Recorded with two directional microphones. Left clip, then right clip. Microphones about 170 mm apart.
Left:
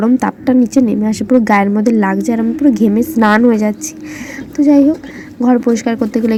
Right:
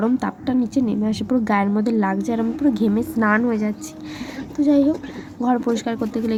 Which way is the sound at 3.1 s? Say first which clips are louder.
Left 9 dB; 20° left (ahead or behind).